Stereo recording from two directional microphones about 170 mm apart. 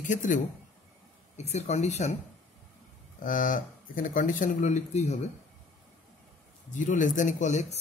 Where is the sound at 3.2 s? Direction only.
50° left (ahead or behind).